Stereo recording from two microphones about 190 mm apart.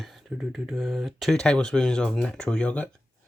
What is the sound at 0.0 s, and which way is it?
Speech, centre (ahead or behind).